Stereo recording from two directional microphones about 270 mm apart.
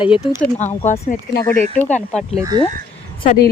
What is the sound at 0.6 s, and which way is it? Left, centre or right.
Speech, left.